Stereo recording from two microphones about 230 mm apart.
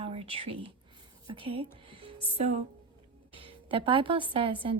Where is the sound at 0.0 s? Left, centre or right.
Right.